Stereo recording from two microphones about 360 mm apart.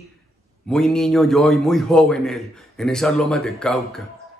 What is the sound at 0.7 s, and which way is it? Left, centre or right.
A man's voice, centre.